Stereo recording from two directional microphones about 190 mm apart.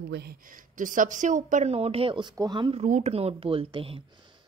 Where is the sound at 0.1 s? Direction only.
55° right (ahead or behind); by 4.0 s 30° right (ahead or behind).